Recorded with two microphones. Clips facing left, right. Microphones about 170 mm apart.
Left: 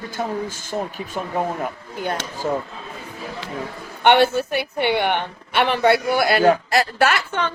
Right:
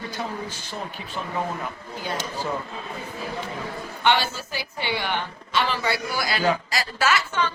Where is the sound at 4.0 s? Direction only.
60° left (ahead or behind).